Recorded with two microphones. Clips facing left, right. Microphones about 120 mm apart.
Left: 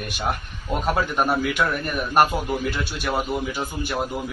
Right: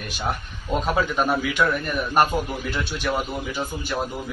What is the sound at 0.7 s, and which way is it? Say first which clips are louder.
A man's voice: even; 10° left (ahead or behind).